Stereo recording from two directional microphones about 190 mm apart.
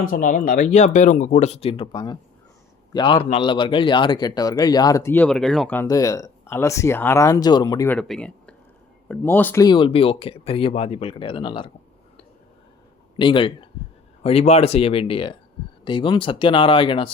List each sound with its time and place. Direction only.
0.0 s a man's voice: 45° left (ahead or behind); by 7.9 s 20° left (ahead or behind)
7.9 s speech: 5° left (ahead or behind)
9.6 s a man's voice: 25° left (ahead or behind)
13.1 s a man's voice: 25° left (ahead or behind)